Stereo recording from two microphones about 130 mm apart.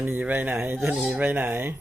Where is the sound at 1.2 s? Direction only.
15° right (ahead or behind).